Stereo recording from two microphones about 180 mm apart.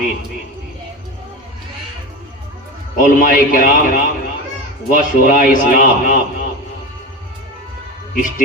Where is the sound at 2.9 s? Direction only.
50° left (ahead or behind).